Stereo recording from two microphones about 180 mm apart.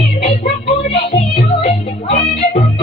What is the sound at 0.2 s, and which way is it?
Music, 45° left (ahead or behind).